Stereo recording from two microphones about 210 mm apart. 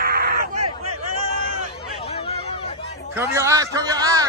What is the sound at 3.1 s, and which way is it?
A man's voice, 10° right (ahead or behind).